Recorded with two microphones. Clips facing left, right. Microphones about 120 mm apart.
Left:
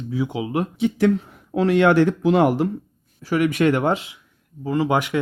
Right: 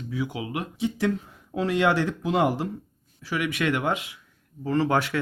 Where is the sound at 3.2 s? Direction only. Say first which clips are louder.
Left 8 dB; 45° left (ahead or behind).